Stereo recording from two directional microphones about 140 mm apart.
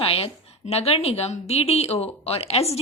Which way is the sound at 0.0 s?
40° left (ahead or behind).